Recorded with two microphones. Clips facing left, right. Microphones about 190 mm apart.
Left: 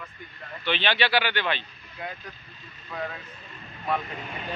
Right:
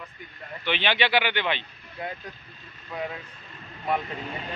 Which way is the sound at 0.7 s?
15° right (ahead or behind).